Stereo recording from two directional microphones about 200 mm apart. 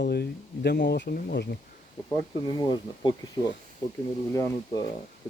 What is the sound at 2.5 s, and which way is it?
Speech, 20° left (ahead or behind).